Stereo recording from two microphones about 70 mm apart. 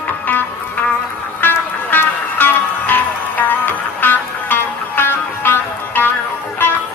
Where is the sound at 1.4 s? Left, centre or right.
Left.